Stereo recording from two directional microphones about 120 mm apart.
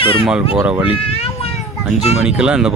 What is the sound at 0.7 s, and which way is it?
Speech, 10° right (ahead or behind).